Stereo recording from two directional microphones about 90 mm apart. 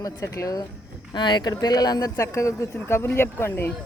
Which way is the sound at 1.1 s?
55° left (ahead or behind).